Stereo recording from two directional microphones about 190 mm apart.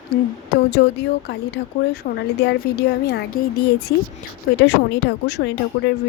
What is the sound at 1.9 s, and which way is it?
Speech, 60° left (ahead or behind).